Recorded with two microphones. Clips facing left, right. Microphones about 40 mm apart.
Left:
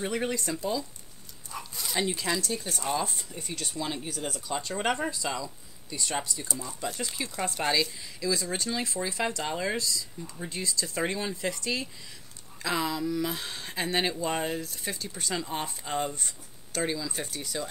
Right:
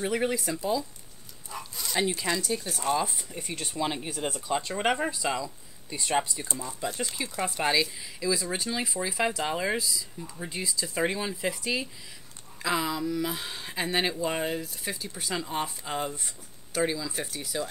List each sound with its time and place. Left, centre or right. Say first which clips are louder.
0.0 s speech: right 2 dB; centre
3.7 s speech: right 4 dB; right
6.6 s speech: right 4 dB; centre